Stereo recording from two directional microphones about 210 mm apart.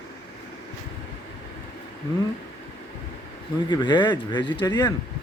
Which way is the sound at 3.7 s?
20° left (ahead or behind).